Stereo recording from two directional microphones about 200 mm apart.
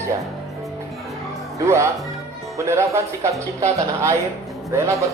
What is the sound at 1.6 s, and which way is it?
Speech, 15° right (ahead or behind).